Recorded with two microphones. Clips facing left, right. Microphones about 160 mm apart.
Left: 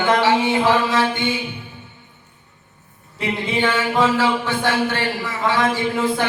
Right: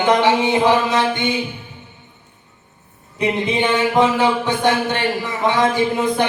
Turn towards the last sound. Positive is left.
turn(degrees=-20)  # may be behind; listen again after turning